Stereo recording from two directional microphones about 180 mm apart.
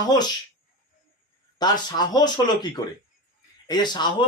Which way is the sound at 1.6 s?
25° left (ahead or behind).